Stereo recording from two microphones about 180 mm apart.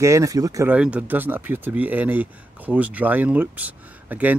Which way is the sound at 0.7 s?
5° right (ahead or behind).